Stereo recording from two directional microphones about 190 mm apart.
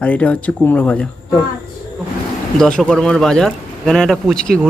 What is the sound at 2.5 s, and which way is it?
Speech, centre (ahead or behind).